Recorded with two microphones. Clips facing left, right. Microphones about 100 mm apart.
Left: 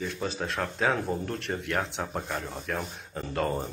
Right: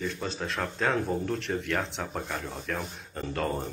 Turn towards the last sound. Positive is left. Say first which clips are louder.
# left 1 dB
turn(degrees=0)  # may be behind; listen again after turning